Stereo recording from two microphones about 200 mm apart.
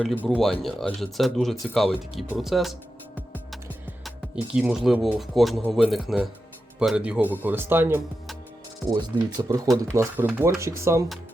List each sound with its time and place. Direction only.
0.0 s speech: centre (ahead or behind)
4.5 s speech: 5° right (ahead or behind)
9.4 s speech: 20° right (ahead or behind)